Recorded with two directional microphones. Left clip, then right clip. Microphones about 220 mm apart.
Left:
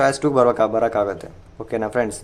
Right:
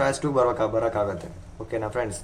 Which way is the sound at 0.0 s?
50° left (ahead or behind).